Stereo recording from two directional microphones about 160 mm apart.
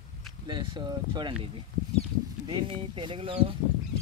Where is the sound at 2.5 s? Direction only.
30° right (ahead or behind).